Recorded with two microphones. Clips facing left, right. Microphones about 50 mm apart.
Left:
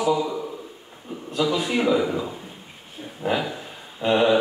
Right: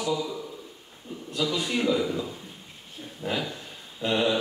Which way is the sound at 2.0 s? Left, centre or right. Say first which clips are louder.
Left 4 dB; centre.